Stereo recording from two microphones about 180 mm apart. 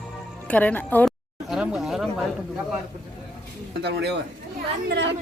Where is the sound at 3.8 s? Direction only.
70° right (ahead or behind).